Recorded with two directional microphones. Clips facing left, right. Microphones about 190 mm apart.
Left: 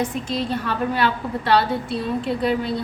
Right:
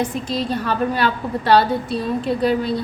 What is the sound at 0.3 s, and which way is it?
A woman's voice, 35° right (ahead or behind).